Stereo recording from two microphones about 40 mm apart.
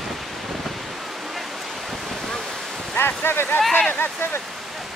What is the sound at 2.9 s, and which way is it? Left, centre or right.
Speech, left.